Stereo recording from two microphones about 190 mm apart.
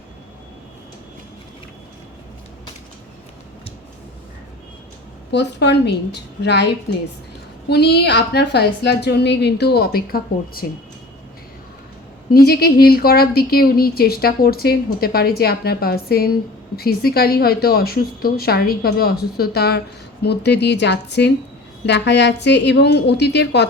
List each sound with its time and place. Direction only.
5.3 s a woman's voice: 65° left (ahead or behind)
7.7 s a woman's voice: 60° left (ahead or behind)
12.5 s a woman's voice: 55° left (ahead or behind)